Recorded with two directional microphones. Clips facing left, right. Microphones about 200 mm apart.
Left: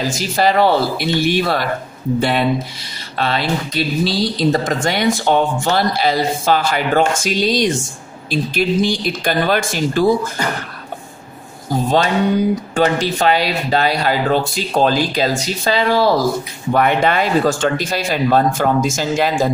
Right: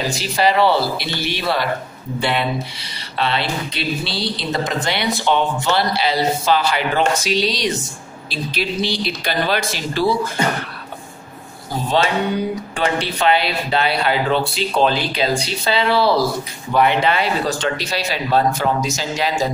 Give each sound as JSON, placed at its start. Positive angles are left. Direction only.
{"t": 0.1, "sound": "speech", "side_deg": 45}
{"t": 12.7, "sound": "speech", "side_deg": 45}